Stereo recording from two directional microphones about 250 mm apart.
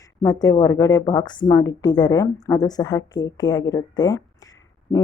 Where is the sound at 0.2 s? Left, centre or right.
Centre.